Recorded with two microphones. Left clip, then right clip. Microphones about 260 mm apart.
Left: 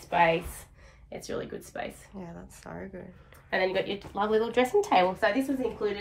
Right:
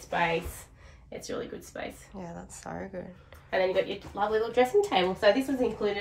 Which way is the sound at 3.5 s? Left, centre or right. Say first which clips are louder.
Right 1 dB; left.